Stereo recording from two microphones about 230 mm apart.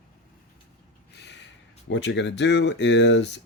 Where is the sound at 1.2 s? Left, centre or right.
Left.